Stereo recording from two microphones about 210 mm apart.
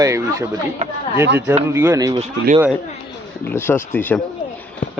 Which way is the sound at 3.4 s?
10° left (ahead or behind).